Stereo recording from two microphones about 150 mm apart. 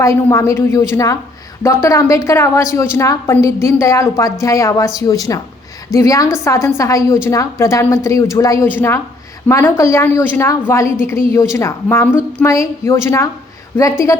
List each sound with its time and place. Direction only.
0.0 s a woman's voice: 20° left (ahead or behind)